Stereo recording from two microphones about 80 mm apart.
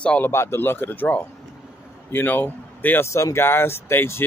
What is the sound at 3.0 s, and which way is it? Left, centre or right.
Speech, left.